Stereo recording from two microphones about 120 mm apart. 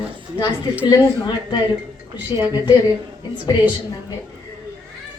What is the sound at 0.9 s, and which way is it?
A woman's voice, 40° left (ahead or behind).